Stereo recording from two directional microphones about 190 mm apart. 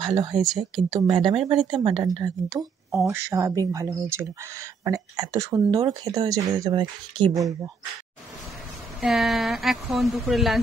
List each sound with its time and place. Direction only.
0.0 s a woman's voice: 20° right (ahead or behind)
0.4 s speech: centre (ahead or behind)
0.8 s a woman's voice: 20° right (ahead or behind)
9.0 s speech: centre (ahead or behind)